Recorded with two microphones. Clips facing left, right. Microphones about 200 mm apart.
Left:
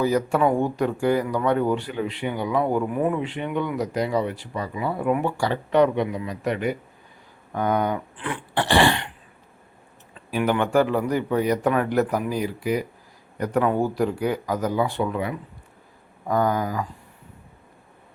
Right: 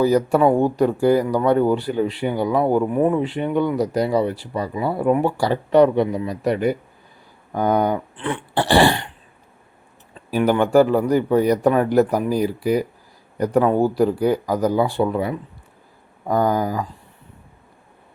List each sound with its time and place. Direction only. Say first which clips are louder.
0.0 s speech: right 5 dB; 35° right (ahead or behind)
10.3 s speech: right 5 dB; 35° right (ahead or behind)